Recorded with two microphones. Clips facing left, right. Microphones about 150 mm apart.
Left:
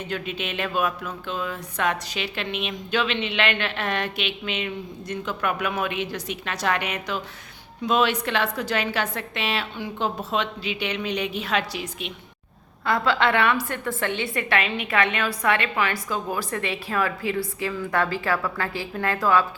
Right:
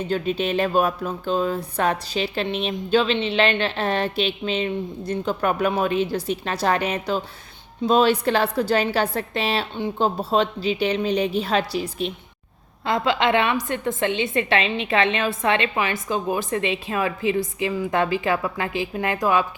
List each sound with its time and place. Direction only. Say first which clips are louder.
0.1 s speech: right 9 dB; 35° right (ahead or behind)
12.8 s a woman's voice: right 1 dB; 20° right (ahead or behind)